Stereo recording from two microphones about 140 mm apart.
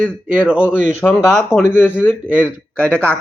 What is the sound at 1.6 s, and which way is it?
Speech, 15° left (ahead or behind).